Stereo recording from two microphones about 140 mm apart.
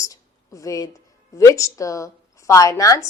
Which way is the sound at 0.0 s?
25° left (ahead or behind).